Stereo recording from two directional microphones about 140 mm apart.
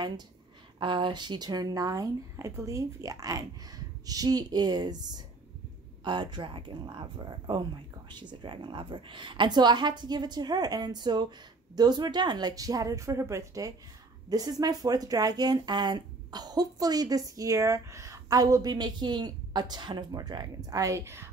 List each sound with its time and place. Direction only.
0.7 s a woman's voice: 35° right (ahead or behind); by 21.3 s 20° right (ahead or behind)